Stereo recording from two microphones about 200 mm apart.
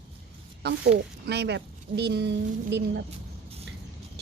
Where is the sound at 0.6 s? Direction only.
55° right (ahead or behind).